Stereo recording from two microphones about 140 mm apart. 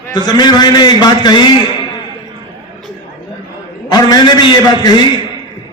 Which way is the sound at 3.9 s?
30° left (ahead or behind).